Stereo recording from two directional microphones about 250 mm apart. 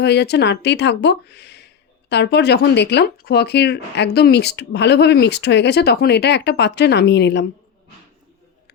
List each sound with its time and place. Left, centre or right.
0.0 s speech: left